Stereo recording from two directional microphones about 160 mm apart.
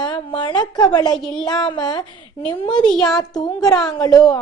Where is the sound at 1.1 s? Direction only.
5° left (ahead or behind).